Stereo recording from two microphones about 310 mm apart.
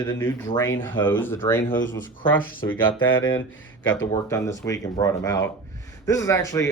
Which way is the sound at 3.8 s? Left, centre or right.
Left.